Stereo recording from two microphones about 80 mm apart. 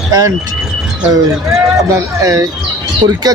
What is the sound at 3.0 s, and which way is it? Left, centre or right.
Speech, right.